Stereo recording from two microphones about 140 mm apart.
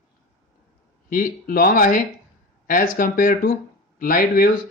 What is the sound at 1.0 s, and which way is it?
Speech, 85° left.